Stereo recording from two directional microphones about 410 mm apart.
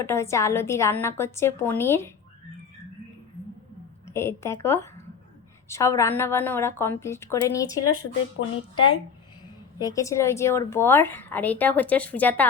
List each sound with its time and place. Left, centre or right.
0.0 s a woman's voice: centre
4.1 s a woman's voice: centre
8.4 s speech: left
9.7 s a woman's voice: centre